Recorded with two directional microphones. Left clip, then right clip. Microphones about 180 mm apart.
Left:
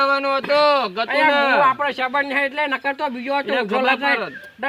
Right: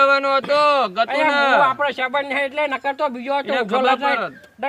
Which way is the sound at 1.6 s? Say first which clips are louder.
Left 1 dB; 45° right (ahead or behind).